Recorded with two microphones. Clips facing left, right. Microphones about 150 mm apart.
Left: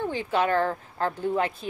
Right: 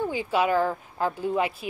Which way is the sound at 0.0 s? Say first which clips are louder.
Right 1 dB; 10° right (ahead or behind).